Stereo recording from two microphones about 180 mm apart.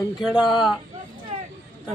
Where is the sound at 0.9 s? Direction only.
35° right (ahead or behind).